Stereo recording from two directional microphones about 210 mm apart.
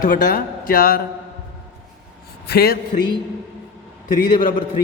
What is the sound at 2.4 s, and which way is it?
Speech, 50° left (ahead or behind).